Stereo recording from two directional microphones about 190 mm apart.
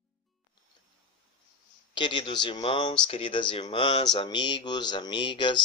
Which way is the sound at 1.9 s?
25° left (ahead or behind).